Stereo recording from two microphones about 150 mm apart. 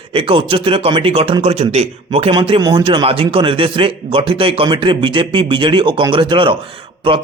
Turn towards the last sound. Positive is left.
turn(degrees=-35)  # may be behind; listen again after turning